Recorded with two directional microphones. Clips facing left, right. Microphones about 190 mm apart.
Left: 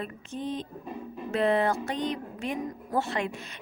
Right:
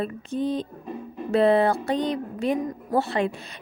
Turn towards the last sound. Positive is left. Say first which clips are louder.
# right 5 dB
turn(degrees=-35)  # may be behind; listen again after turning